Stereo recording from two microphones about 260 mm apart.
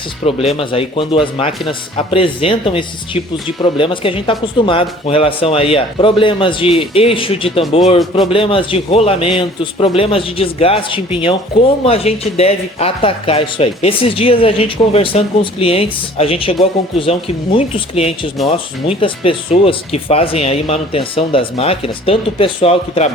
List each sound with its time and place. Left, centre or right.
0.3 s speech: left